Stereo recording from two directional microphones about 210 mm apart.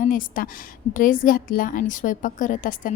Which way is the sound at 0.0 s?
40° left (ahead or behind).